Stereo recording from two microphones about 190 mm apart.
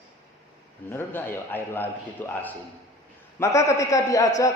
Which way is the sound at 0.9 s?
10° left (ahead or behind).